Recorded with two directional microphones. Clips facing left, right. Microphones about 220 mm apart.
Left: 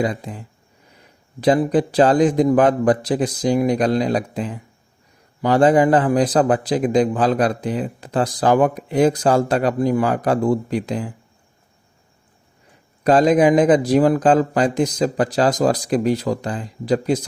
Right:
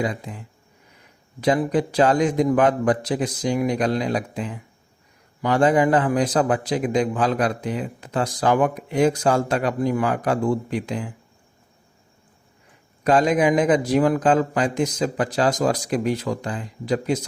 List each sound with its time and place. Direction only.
0.0 s a man's voice: 35° left (ahead or behind)
13.1 s a man's voice: 35° left (ahead or behind)